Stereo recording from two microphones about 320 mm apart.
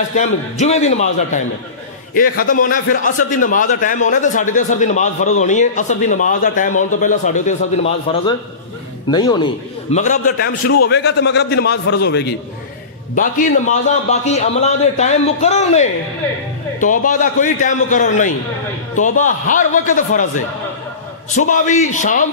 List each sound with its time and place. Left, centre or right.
0.1 s a man's voice: left
10.9 s a man's voice: left
21.3 s a man's voice: left